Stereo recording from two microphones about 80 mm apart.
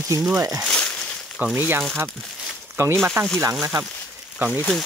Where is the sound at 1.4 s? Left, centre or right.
Right.